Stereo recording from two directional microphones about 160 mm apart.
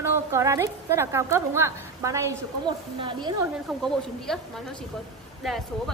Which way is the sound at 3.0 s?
30° right (ahead or behind).